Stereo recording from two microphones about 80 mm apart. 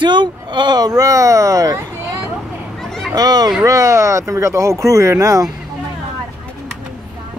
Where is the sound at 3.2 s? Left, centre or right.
Right.